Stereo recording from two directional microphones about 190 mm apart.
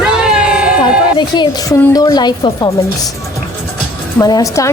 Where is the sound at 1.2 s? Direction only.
25° left (ahead or behind).